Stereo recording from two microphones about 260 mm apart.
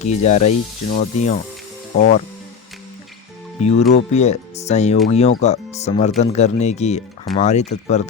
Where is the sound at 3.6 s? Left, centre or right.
Left.